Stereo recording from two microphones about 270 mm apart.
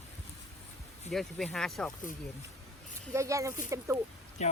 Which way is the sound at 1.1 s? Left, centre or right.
Centre.